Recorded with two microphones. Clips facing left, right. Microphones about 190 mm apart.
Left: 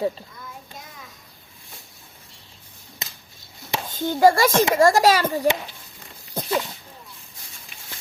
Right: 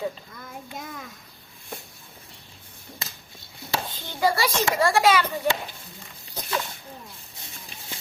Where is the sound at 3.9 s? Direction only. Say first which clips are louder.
Left 9 dB; 45° left (ahead or behind).